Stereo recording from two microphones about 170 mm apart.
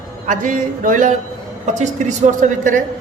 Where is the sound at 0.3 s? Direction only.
50° right (ahead or behind).